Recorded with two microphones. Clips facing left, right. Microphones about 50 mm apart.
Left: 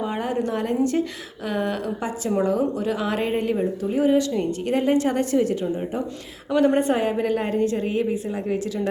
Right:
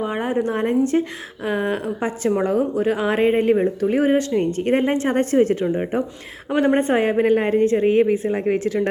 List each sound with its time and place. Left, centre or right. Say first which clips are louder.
0.0 s a woman's voice: right 3 dB; right
3.8 s a woman's voice: right 2 dB; right